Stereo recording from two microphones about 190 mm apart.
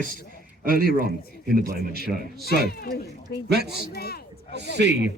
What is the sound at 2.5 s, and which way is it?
Speech, 55° left (ahead or behind).